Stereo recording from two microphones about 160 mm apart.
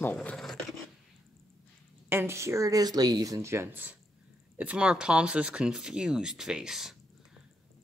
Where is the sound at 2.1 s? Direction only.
15° right (ahead or behind).